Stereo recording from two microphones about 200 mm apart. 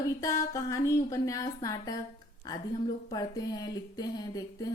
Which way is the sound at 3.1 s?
20° left (ahead or behind).